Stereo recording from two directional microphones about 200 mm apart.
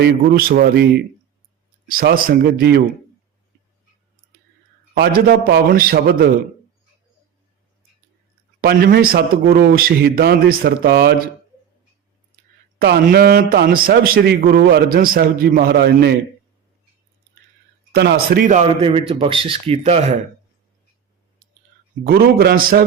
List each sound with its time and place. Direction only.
0.0 s a man's voice: 45° right (ahead or behind)
4.9 s a man's voice: 50° right (ahead or behind)
8.6 s a man's voice: 50° right (ahead or behind)
12.8 s a man's voice: 50° right (ahead or behind)
17.9 s a man's voice: 50° right (ahead or behind); by 20.1 s 30° right (ahead or behind)
22.0 s a man's voice: 50° right (ahead or behind)